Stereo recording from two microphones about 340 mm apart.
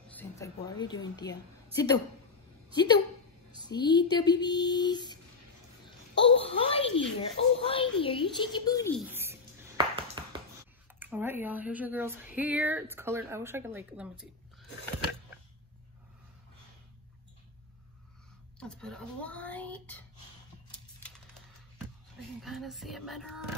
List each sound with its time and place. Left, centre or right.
0.1 s a woman's voice: centre
9.1 s ping: centre
11.4 s speech: centre
18.6 s speech: centre
22.4 s speech: centre